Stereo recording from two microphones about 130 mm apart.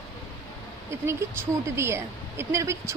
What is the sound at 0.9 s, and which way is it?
A woman's voice, 20° right (ahead or behind).